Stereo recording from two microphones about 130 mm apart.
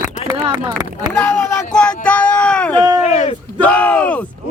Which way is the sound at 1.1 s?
10° left (ahead or behind).